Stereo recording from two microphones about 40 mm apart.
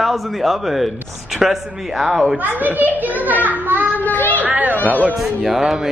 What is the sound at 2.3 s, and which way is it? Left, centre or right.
A child's voice, right.